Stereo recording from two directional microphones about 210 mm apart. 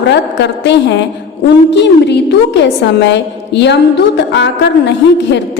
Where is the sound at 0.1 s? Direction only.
55° left (ahead or behind).